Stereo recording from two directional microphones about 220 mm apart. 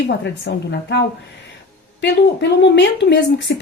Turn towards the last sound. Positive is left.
turn(degrees=55)  # may be behind; listen again after turning